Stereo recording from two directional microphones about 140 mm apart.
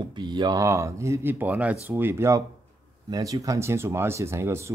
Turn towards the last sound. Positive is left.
turn(degrees=-20)  # may be behind; listen again after turning